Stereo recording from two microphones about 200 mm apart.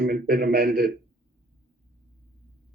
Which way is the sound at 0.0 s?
45° right (ahead or behind).